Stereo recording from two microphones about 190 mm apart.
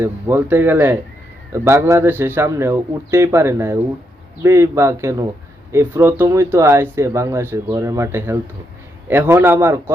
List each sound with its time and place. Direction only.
0.0 s speech: 10° right (ahead or behind)